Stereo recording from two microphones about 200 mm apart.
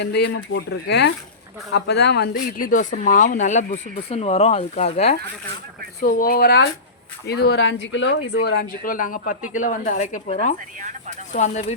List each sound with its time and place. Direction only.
0.0 s speech: 60° left (ahead or behind); by 5.1 s 30° left (ahead or behind)
6.0 s speech: 45° left (ahead or behind)